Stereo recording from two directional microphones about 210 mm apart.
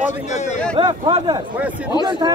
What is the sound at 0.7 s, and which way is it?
Speech, 20° right (ahead or behind).